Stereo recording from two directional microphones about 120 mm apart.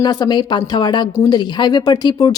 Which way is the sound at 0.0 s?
35° left (ahead or behind).